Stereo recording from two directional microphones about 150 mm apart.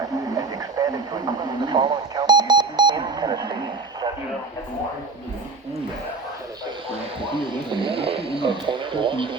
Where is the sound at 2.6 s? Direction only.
30° right (ahead or behind).